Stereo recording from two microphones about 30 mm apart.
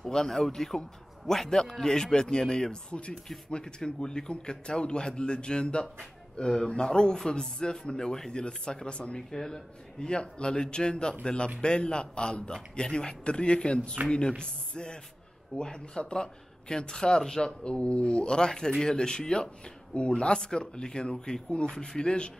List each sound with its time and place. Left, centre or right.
0.0 s a man's voice: centre; by 9.2 s left
9.3 s speech: centre
9.9 s a man's voice: left
19.9 s a man's voice: left